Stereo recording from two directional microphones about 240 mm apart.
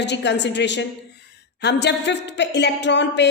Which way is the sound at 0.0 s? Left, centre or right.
Left.